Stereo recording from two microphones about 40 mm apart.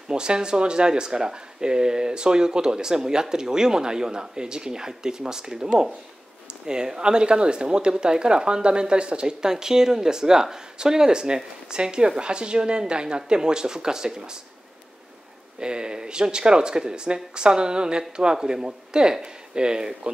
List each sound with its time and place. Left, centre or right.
0.1 s speech: right
15.6 s speech: right